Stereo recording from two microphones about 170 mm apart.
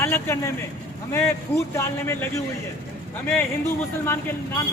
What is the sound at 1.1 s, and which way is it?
Speech, 15° left (ahead or behind).